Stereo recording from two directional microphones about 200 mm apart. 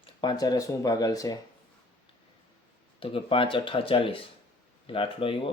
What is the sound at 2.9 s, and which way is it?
Speech, 25° left (ahead or behind).